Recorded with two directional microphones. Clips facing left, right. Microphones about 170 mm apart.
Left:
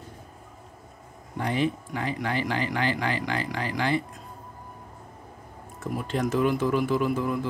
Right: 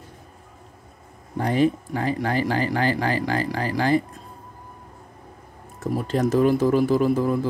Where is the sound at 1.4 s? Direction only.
40° right (ahead or behind).